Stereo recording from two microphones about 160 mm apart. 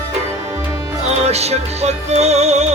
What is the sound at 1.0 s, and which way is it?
Music, 40° right (ahead or behind).